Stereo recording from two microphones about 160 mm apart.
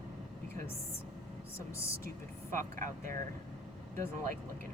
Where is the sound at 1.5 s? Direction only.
15° left (ahead or behind).